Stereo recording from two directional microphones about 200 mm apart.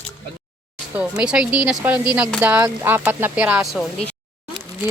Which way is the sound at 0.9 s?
5° right (ahead or behind).